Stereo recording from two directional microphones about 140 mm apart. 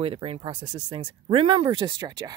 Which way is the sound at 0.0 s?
40° right (ahead or behind).